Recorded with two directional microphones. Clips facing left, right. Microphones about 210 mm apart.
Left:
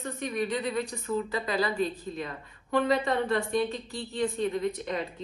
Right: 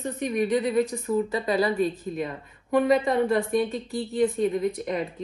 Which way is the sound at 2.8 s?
20° right (ahead or behind).